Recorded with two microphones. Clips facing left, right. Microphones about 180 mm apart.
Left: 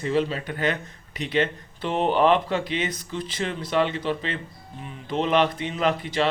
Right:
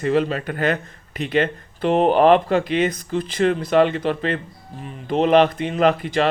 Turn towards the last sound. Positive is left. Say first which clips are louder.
# right 6 dB
turn(degrees=-55)  # may be behind; listen again after turning